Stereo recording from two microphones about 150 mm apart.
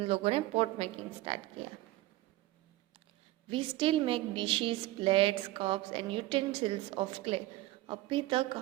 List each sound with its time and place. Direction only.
0.0 s a woman's voice: 40° right (ahead or behind)
3.5 s a woman's voice: 35° right (ahead or behind)